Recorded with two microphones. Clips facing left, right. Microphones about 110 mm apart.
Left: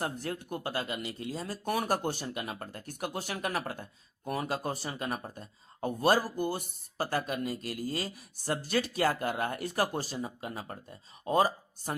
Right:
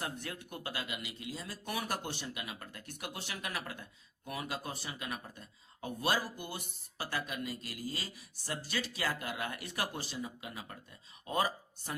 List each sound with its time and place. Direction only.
0.0 s speech: 40° left (ahead or behind)